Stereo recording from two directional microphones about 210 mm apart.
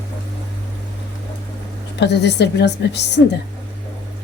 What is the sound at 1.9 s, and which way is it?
A woman's voice, 55° left (ahead or behind).